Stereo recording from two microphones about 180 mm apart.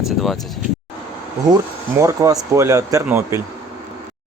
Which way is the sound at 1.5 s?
15° right (ahead or behind).